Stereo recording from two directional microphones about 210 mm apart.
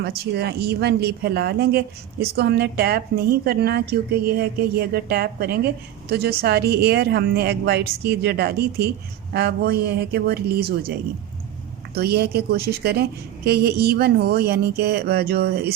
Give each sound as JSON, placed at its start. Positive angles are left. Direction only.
{"t": 0.3, "sound": "a woman's voice", "side_deg": -50}
{"t": 11.9, "sound": "a woman's voice", "side_deg": -50}